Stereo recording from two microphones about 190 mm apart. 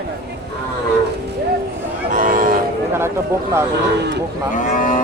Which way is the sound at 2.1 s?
45° right (ahead or behind).